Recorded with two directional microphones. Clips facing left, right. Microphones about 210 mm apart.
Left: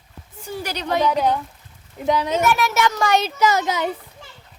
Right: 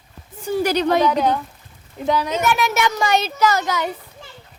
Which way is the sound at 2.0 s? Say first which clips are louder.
Even; 20° left (ahead or behind).